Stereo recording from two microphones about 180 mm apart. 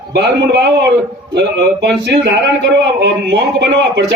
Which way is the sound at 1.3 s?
70° right (ahead or behind).